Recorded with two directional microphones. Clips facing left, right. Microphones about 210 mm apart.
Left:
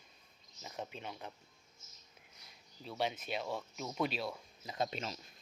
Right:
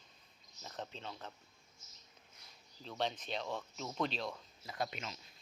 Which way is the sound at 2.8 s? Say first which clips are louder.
Left 1 dB; 10° left (ahead or behind).